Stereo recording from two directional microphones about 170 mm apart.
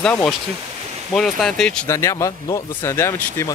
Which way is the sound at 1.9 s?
15° left (ahead or behind).